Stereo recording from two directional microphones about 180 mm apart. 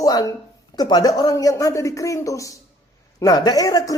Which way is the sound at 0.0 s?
20° left (ahead or behind).